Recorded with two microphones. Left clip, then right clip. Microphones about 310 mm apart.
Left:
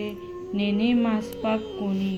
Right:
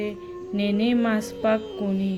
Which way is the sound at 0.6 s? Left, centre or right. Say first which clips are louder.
Right 1 dB; right.